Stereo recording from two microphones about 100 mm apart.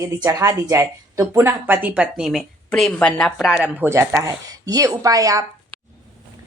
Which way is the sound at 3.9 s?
30° right (ahead or behind).